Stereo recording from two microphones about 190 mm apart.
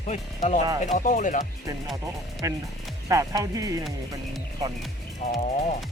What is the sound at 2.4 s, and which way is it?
Speech, 15° right (ahead or behind).